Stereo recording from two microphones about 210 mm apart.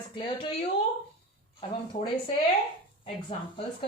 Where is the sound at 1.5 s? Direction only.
25° left (ahead or behind).